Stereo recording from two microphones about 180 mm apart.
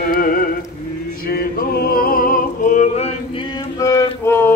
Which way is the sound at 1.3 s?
55° left (ahead or behind).